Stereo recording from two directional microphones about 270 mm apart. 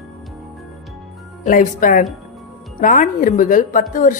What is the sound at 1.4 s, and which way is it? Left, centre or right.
A woman's voice, left.